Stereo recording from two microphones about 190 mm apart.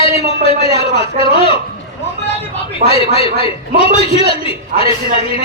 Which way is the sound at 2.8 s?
40° right (ahead or behind).